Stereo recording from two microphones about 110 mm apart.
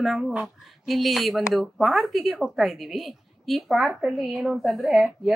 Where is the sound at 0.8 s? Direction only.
Centre (ahead or behind).